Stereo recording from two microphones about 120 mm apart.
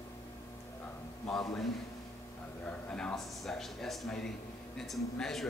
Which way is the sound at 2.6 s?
10° left (ahead or behind).